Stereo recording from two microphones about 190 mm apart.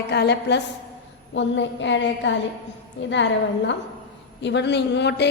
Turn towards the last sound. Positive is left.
turn(degrees=65)  # may be behind; listen again after turning